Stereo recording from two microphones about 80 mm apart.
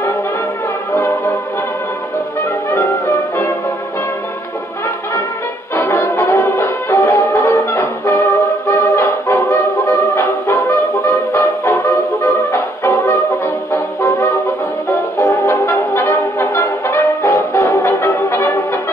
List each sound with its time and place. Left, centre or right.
2.7 s brass instrument: left
5.8 s brass instrument: left
6.5 s music: left
14.9 s brass instrument: left
15.6 s brass instrument: left